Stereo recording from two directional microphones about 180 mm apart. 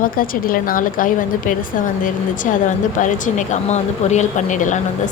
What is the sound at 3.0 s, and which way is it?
Speech, 45° left (ahead or behind).